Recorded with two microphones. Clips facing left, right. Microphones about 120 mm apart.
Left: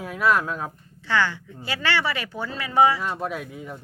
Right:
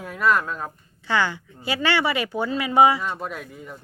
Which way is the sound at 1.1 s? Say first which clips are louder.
Even; 15° right (ahead or behind).